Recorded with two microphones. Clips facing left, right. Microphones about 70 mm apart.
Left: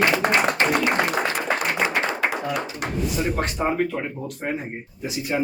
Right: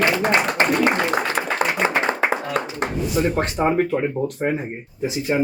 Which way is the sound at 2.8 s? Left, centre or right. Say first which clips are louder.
Right 4 dB; right.